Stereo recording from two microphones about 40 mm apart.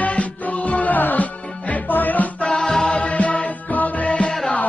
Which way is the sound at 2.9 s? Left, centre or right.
Left.